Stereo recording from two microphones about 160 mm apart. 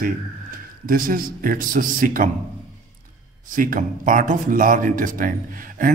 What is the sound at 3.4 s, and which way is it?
Speech, 60° right (ahead or behind).